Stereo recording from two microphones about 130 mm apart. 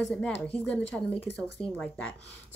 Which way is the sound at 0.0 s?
10° left (ahead or behind).